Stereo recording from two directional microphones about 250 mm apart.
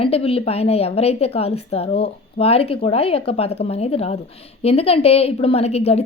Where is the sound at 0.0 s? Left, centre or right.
Left.